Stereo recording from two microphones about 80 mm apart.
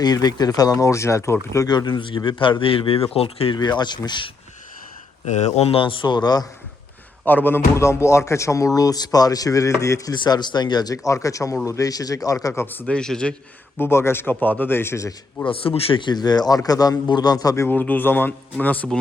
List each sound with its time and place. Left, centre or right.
0.0 s speech: left
1.6 s a man's voice: left
3.5 s speech: left
5.8 s speech: left
7.3 s speech: left
10.2 s speech: left
12.5 s speech: left
12.9 s a man's voice: centre
13.7 s speech: left
15.4 s speech: left
17.7 s speech: left